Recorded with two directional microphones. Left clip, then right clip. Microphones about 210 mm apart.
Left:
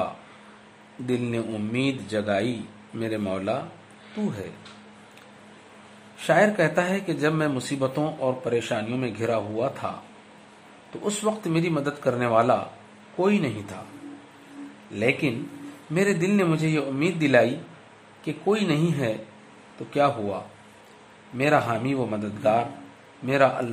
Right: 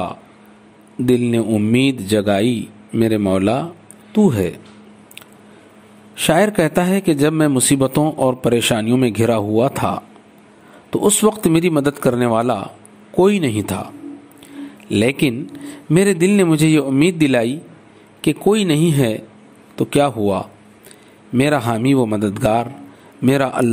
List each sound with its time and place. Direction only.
1.0 s a man's voice: 40° right (ahead or behind)
6.1 s a man's voice: 40° right (ahead or behind)
15.0 s a man's voice: 40° right (ahead or behind)
21.4 s a man's voice: 45° right (ahead or behind)